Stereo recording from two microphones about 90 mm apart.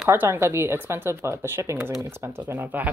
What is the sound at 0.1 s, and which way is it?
Speech, 25° right (ahead or behind).